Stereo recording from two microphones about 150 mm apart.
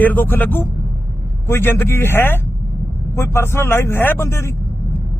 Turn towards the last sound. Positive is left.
turn(degrees=20)  # may be behind; listen again after turning